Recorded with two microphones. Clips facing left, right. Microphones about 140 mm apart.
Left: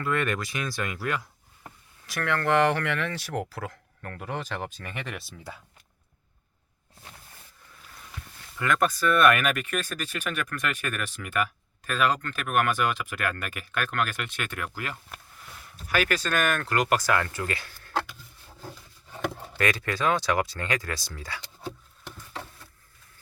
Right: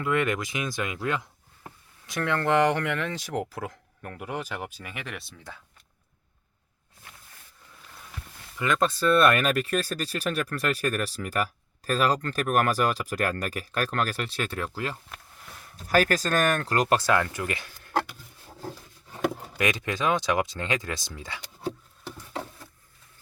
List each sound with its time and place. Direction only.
0.0 s speech: 15° right (ahead or behind); by 5.6 s 5° left (ahead or behind)
8.5 s speech: 20° right (ahead or behind)
19.5 s speech: 20° right (ahead or behind)